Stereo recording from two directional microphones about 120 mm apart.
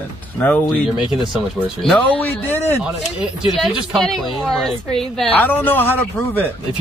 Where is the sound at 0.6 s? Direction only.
Centre (ahead or behind).